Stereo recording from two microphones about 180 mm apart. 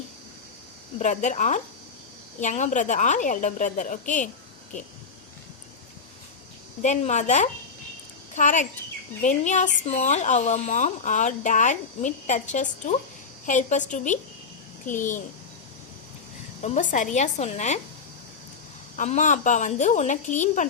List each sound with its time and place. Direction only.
0.9 s speech: 40° left (ahead or behind)
6.8 s a woman's voice: 40° left (ahead or behind)
16.6 s a woman's voice: 40° left (ahead or behind)
18.9 s speech: 45° left (ahead or behind)